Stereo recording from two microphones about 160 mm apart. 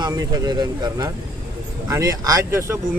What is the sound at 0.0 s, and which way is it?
Speech, 25° right (ahead or behind).